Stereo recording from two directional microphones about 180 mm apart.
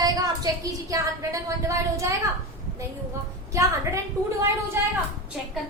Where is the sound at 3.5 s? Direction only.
15° right (ahead or behind).